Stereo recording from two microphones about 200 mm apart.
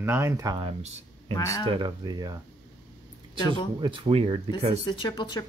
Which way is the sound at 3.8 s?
25° right (ahead or behind).